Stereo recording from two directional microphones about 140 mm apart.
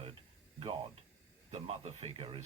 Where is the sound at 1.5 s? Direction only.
45° right (ahead or behind).